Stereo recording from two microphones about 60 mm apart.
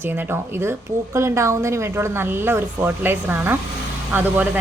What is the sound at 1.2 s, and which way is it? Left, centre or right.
Speech, right.